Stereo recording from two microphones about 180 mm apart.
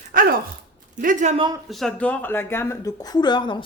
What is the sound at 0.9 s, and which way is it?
Speech, 45° right (ahead or behind).